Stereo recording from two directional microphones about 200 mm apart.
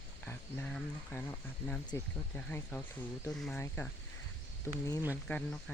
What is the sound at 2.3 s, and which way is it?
Speech, 10° left (ahead or behind).